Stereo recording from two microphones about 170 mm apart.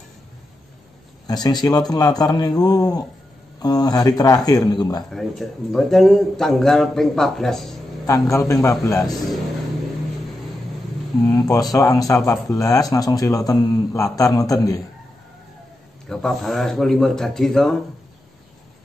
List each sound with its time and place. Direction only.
1.2 s a man's voice: 25° left (ahead or behind)
5.1 s a man's voice: centre (ahead or behind)
8.1 s a man's voice: 20° left (ahead or behind)
11.2 s a man's voice: 20° left (ahead or behind)
16.1 s a man's voice: centre (ahead or behind)